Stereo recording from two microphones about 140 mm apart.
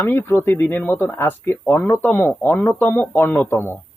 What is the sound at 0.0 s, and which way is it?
Speech, 15° left (ahead or behind).